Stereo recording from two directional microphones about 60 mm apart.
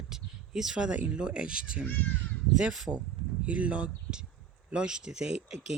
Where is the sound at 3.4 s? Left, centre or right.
Right.